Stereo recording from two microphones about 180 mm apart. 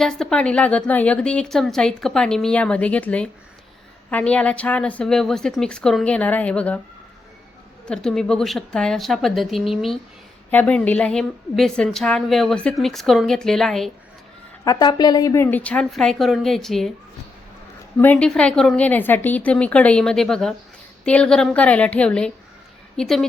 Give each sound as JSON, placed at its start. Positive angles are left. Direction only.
{"t": 0.0, "sound": "a woman's voice", "side_deg": 5}
{"t": 7.9, "sound": "a woman's voice", "side_deg": 5}
{"t": 14.6, "sound": "speech", "side_deg": 20}
{"t": 18.0, "sound": "a woman's voice", "side_deg": 10}